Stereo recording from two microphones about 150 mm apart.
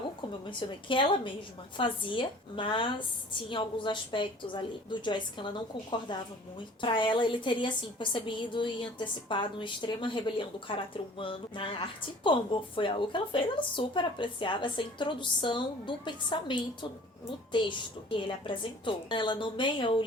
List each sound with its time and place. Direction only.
0.6 s a woman's voice: 35° left (ahead or behind)
6.8 s a woman's voice: 35° left (ahead or behind)